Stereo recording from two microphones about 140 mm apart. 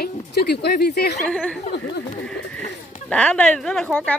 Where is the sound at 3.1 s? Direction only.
10° left (ahead or behind).